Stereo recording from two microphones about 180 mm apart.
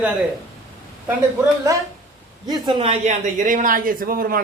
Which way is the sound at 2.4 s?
25° right (ahead or behind).